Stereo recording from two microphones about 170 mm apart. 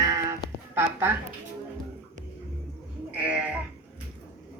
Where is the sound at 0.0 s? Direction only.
20° right (ahead or behind).